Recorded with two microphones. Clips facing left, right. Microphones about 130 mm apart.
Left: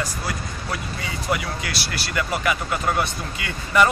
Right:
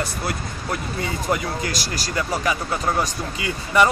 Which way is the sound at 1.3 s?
40° right (ahead or behind).